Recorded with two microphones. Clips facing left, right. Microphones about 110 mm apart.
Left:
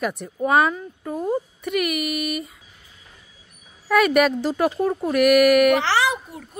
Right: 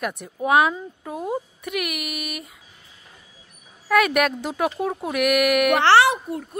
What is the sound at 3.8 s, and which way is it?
Speech, centre (ahead or behind).